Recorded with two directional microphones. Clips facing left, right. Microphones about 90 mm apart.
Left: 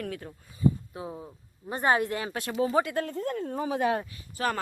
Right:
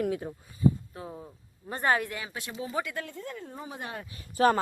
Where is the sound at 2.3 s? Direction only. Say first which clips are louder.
Left 6 dB; 55° left (ahead or behind).